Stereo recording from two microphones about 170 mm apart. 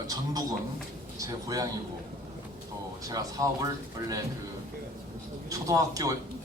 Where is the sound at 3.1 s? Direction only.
20° right (ahead or behind).